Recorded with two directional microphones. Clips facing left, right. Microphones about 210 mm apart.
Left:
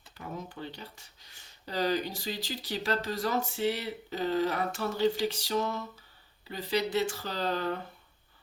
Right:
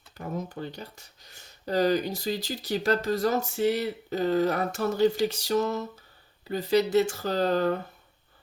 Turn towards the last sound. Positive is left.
turn(degrees=-45)  # may be behind; listen again after turning